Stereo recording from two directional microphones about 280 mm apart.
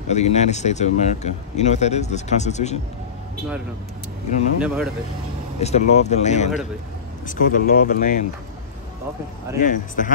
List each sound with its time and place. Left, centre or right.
0.1 s speech: left
4.6 s speech: centre
5.6 s speech: left
9.6 s speech: left